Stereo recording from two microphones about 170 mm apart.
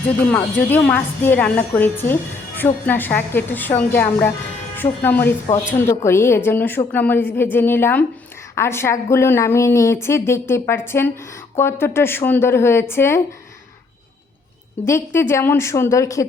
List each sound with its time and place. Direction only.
0.3 s a woman's voice: 10° left (ahead or behind)
14.8 s a woman's voice: 15° left (ahead or behind)